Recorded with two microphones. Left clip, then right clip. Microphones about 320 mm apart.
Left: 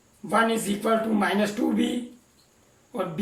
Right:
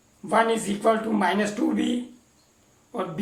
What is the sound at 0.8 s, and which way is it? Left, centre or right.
Speech, right.